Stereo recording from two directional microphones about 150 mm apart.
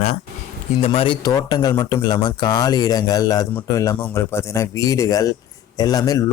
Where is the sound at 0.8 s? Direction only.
40° left (ahead or behind).